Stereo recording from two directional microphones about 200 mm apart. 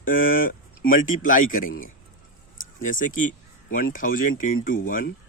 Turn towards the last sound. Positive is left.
turn(degrees=45)  # may be behind; listen again after turning